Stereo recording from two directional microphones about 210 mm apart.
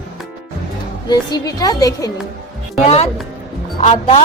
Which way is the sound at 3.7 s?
25° left (ahead or behind).